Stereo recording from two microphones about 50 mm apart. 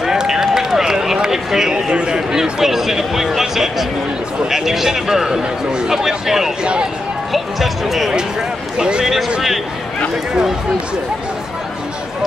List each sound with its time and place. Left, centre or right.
0.0 s a man's voice: centre
6.6 s speech: centre
7.3 s speech: centre
8.7 s a man's voice: centre